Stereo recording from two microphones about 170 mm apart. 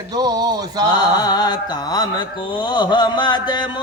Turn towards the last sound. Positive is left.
turn(degrees=25)  # may be behind; listen again after turning